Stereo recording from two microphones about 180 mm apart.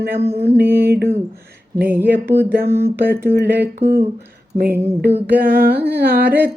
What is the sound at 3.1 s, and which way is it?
Speech, 60° right (ahead or behind).